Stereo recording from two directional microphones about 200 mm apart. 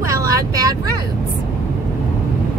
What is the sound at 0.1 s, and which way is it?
Vehicle, 15° right (ahead or behind).